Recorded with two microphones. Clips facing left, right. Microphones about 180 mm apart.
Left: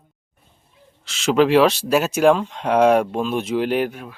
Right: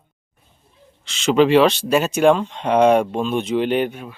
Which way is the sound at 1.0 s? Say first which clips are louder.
Right 1 dB; centre (ahead or behind).